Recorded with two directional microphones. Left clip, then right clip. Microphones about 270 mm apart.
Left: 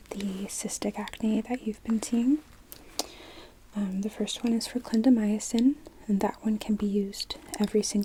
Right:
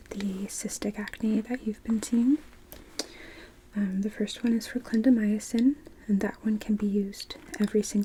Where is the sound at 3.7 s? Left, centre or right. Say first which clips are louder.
Right 1 dB; centre.